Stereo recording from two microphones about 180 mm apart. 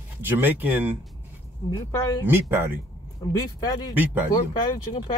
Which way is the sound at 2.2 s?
10° right (ahead or behind).